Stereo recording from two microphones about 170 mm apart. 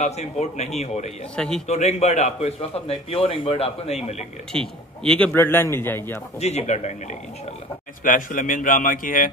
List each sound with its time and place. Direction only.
0.0 s a man's voice: 40° left (ahead or behind)
1.3 s speech: 5° left (ahead or behind)
1.7 s a man's voice: 40° left (ahead or behind)
4.5 s a man's voice: 5° left (ahead or behind)
6.4 s a man's voice: 40° left (ahead or behind)